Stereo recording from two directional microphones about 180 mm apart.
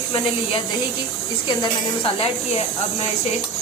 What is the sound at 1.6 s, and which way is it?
Speech, 30° left (ahead or behind).